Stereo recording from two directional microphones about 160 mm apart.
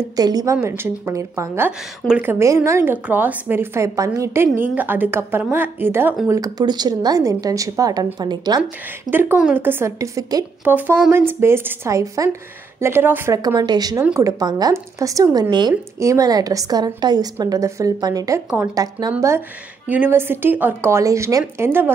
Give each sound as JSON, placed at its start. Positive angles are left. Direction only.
{"t": 0.1, "sound": "a woman's voice", "side_deg": -25}
{"t": 9.1, "sound": "a woman's voice", "side_deg": -10}
{"t": 19.9, "sound": "a woman's voice", "side_deg": -10}